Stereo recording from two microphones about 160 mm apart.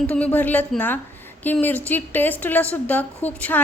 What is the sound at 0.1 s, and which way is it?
A woman's voice, 10° left (ahead or behind).